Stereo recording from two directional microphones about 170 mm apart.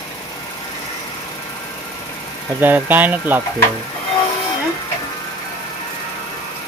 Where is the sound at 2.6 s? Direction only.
10° right (ahead or behind).